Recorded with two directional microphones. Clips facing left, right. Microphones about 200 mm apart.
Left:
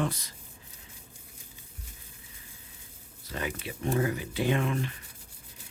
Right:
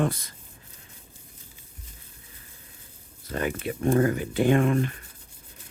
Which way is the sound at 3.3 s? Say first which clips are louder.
Right 7 dB; 50° right (ahead or behind).